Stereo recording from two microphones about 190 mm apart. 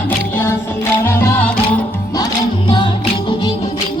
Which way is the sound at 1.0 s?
10° left (ahead or behind).